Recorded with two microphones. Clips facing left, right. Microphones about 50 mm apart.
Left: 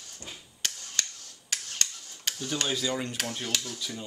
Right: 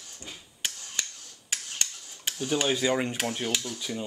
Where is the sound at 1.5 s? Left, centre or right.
Centre.